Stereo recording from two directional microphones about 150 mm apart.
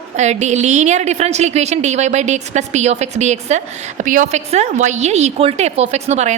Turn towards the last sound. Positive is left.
turn(degrees=-50)  # may be behind; listen again after turning